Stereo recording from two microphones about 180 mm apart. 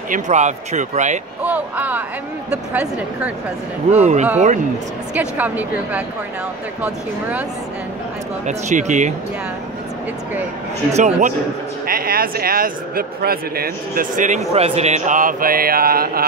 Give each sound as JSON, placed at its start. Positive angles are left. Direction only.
{"t": 0.1, "sound": "speech", "side_deg": -40}
{"t": 1.4, "sound": "speech", "side_deg": -10}
{"t": 3.9, "sound": "speech", "side_deg": -40}
{"t": 5.1, "sound": "speech", "side_deg": -10}
{"t": 8.5, "sound": "speech", "side_deg": -40}
{"t": 10.9, "sound": "speech", "side_deg": -40}
{"t": 11.8, "sound": "a man's voice", "side_deg": -55}